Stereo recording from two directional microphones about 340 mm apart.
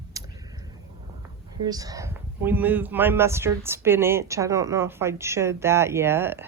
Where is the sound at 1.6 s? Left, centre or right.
Centre.